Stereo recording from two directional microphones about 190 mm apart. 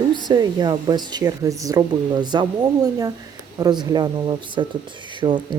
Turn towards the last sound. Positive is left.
turn(degrees=-25)  # may be behind; listen again after turning